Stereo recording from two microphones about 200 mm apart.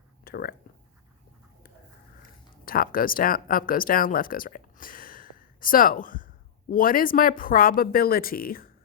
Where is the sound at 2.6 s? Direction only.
45° left (ahead or behind).